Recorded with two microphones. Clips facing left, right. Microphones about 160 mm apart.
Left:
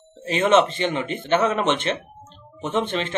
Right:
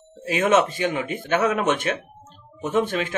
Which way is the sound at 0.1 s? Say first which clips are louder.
Even; 10° right (ahead or behind).